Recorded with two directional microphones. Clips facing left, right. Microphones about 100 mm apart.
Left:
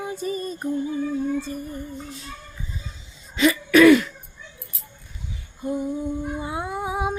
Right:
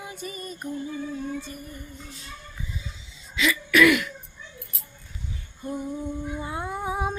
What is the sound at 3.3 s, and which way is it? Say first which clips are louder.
Throat clearing: left 5 dB; 40° left (ahead or behind).